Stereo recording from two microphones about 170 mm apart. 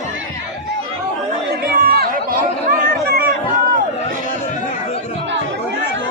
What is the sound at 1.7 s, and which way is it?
Chatter, 65° right (ahead or behind).